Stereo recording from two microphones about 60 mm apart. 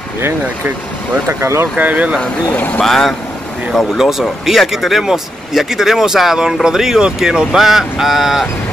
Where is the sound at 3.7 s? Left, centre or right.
Centre.